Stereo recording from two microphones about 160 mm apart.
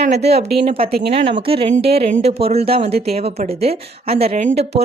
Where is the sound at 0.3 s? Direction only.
40° right (ahead or behind).